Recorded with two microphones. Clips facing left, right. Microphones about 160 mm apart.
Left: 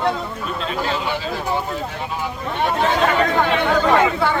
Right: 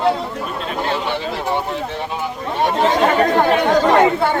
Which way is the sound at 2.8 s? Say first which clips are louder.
Right 3 dB; 30° right (ahead or behind).